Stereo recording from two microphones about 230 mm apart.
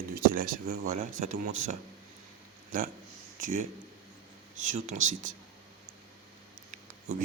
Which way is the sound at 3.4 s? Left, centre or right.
Right.